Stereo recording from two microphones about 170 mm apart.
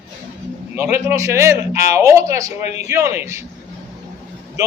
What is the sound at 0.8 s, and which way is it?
A woman's voice, 15° right (ahead or behind).